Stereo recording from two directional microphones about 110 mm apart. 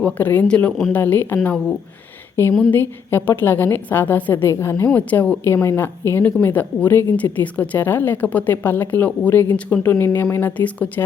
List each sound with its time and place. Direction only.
0.0 s a woman's voice: 15° left (ahead or behind)
4.9 s a woman's voice: 10° left (ahead or behind)